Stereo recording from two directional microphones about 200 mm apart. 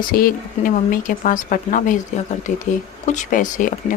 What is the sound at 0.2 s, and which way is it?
Speech, 45° left (ahead or behind).